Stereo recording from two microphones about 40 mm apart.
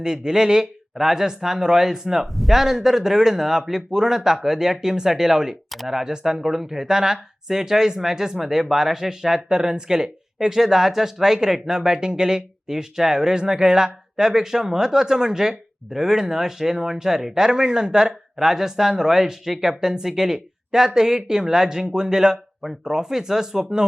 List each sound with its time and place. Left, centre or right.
0.0 s speech: centre
2.2 s speech: centre
5.7 s speech: centre
6.0 s speech: centre